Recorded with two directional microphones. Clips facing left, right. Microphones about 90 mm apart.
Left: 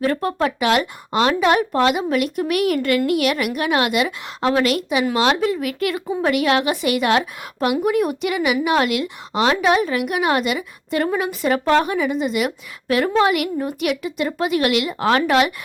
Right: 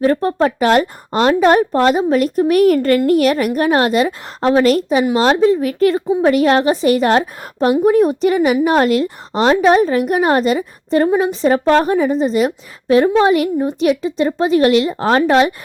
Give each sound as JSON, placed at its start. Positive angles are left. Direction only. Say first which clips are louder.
{"t": 0.0, "sound": "a woman's voice", "louder": "right 5 dB", "side_deg": -30}